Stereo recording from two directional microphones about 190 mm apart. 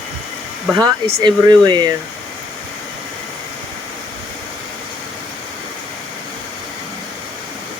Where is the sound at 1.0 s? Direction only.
25° right (ahead or behind).